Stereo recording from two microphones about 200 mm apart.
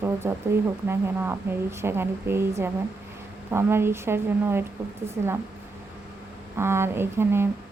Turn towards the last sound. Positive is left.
turn(degrees=-10)  # may be behind; listen again after turning